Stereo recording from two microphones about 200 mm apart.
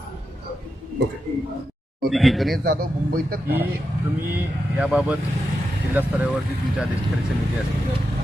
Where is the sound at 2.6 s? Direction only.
50° right (ahead or behind).